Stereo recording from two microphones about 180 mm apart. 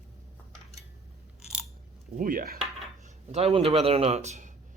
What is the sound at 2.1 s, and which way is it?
Speech, 50° right (ahead or behind).